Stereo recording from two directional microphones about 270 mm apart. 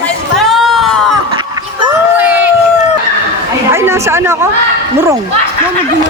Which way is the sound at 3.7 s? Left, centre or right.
Centre.